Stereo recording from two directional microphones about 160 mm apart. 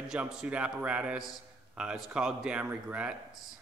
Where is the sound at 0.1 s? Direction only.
5° right (ahead or behind).